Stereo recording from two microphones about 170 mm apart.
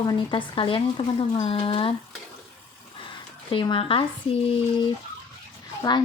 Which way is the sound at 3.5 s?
30° left (ahead or behind).